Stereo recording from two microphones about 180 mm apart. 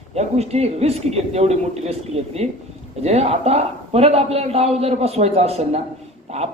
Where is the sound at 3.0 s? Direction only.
35° right (ahead or behind).